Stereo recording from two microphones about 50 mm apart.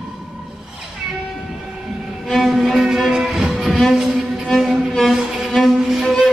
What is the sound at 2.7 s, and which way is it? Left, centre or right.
Music, centre.